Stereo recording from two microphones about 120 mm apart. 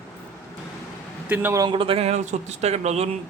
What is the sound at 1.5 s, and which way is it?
Speech, 35° right (ahead or behind).